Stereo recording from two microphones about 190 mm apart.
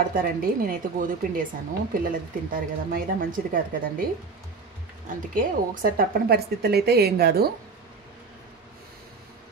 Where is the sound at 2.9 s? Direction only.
50° right (ahead or behind).